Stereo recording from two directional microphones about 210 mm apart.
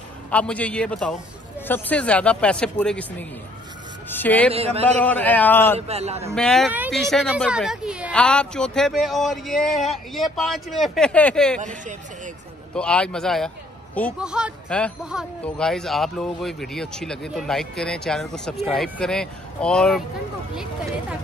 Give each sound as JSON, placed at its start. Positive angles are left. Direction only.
{"t": 0.3, "sound": "a man's voice", "side_deg": 5}
{"t": 4.5, "sound": "a man's voice", "side_deg": -30}
{"t": 5.0, "sound": "a man's voice", "side_deg": 10}
{"t": 5.8, "sound": "a man's voice", "side_deg": -30}
{"t": 6.3, "sound": "speech", "side_deg": 5}
{"t": 11.6, "sound": "speech", "side_deg": -35}
{"t": 12.7, "sound": "speech", "side_deg": 5}